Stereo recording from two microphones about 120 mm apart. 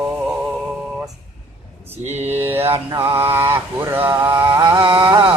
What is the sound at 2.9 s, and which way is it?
Mantra, 25° right (ahead or behind).